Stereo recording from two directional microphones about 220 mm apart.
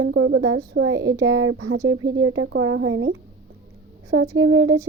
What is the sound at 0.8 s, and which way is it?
Speech, 70° right (ahead or behind).